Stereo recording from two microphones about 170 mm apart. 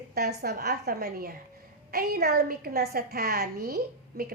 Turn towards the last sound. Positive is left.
turn(degrees=-65)  # may be behind; listen again after turning